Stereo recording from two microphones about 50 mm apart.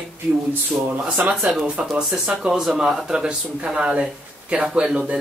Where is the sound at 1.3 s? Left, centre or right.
Centre.